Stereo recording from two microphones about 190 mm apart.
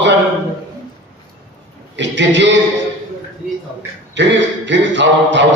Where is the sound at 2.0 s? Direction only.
70° right (ahead or behind).